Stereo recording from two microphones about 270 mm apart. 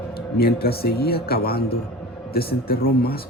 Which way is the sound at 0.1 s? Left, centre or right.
Left.